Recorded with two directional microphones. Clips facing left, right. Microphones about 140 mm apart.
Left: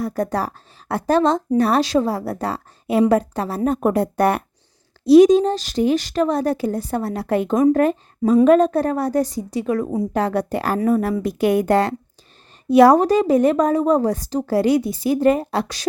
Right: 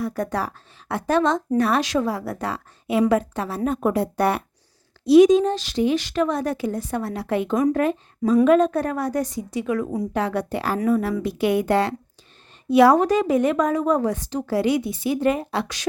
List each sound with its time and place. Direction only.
0.0 s a woman's voice: 35° left (ahead or behind)
5.0 s a woman's voice: 35° left (ahead or behind)